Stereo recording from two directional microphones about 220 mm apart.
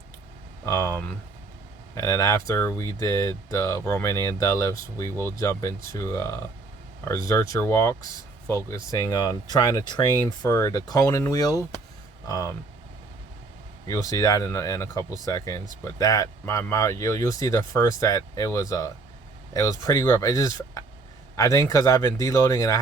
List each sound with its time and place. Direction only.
0.6 s speech: 10° left (ahead or behind)
13.8 s speech: 15° left (ahead or behind)